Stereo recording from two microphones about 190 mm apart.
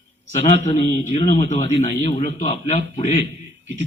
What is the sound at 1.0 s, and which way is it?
A man's voice, 40° left (ahead or behind).